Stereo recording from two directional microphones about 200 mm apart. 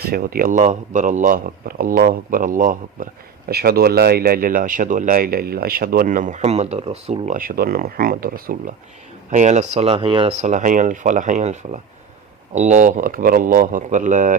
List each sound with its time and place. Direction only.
0.0 s speech: 50° right (ahead or behind)
9.3 s speech: 35° right (ahead or behind)